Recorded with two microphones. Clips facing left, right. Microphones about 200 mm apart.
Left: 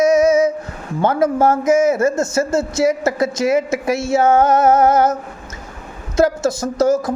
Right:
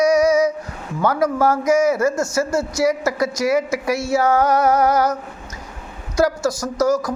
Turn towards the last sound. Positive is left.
turn(degrees=25)  # may be behind; listen again after turning